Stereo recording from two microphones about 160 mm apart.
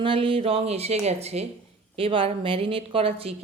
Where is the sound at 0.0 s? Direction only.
35° right (ahead or behind).